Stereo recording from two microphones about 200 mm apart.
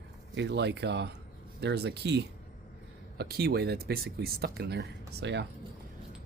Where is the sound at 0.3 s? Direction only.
60° right (ahead or behind).